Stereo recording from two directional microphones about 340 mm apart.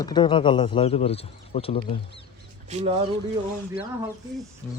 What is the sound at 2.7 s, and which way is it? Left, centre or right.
Speech, centre.